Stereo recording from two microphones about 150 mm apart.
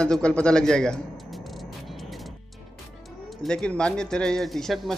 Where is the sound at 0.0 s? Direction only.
5° left (ahead or behind).